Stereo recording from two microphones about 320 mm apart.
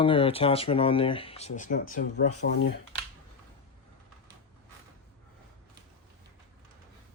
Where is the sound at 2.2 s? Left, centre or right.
Left.